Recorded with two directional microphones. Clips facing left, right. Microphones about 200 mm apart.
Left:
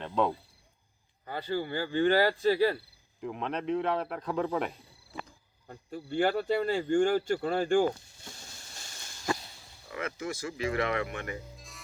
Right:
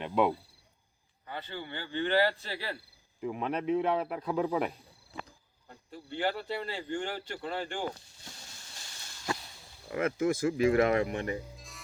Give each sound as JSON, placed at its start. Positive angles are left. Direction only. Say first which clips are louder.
{"t": 0.0, "sound": "cricket", "louder": "right 1 dB", "side_deg": -10}
{"t": 1.3, "sound": "speech", "louder": "left 8 dB", "side_deg": 40}
{"t": 3.2, "sound": "speech", "louder": "right 1 dB", "side_deg": -5}
{"t": 5.6, "sound": "speech", "louder": "left 6 dB", "side_deg": 45}
{"t": 9.9, "sound": "speech", "louder": "right 7 dB", "side_deg": -50}
{"t": 11.5, "sound": "music", "louder": "even", "side_deg": 0}